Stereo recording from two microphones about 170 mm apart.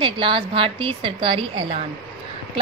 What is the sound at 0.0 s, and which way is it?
A woman's voice, 30° right (ahead or behind).